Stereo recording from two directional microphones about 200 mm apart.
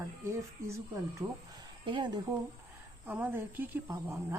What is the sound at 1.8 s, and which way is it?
Speech, 25° right (ahead or behind).